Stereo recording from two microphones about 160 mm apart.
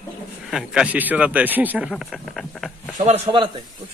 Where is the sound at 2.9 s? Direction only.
40° right (ahead or behind).